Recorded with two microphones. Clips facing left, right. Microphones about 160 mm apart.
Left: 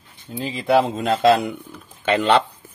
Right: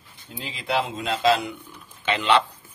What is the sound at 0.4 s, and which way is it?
Speech, 45° left (ahead or behind).